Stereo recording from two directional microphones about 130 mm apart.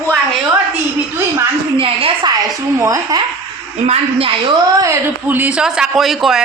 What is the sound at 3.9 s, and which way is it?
Speech, 50° right (ahead or behind).